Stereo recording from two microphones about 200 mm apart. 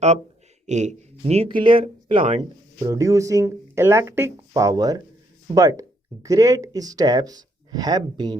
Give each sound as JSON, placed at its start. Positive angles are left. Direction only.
{"t": 0.7, "sound": "speech", "side_deg": -35}
{"t": 2.7, "sound": "speech", "side_deg": -15}